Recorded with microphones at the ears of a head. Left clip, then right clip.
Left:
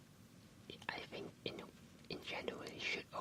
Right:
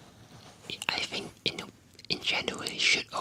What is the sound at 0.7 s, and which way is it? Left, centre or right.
Whispering, right.